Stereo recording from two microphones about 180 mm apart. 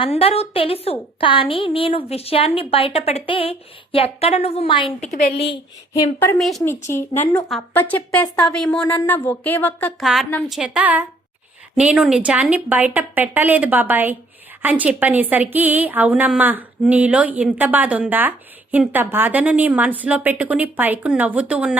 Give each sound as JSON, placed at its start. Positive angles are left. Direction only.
{"t": 0.0, "sound": "a woman's voice", "side_deg": 30}
{"t": 5.9, "sound": "a woman's voice", "side_deg": 15}
{"t": 10.0, "sound": "a woman's voice", "side_deg": 0}